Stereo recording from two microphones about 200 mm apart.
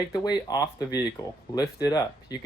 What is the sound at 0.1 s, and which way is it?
Speech, 20° left (ahead or behind).